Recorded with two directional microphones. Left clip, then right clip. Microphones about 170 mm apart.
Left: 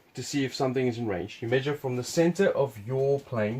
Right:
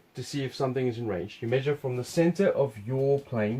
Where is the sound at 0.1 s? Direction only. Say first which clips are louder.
Left 4 dB; 35° left (ahead or behind).